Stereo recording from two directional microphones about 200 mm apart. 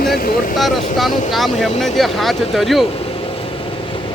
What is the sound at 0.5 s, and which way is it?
Speech, centre (ahead or behind).